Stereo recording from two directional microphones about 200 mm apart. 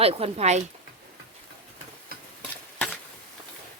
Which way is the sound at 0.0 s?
30° right (ahead or behind).